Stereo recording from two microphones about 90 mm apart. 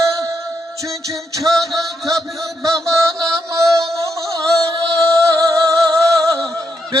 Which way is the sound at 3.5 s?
35° right (ahead or behind).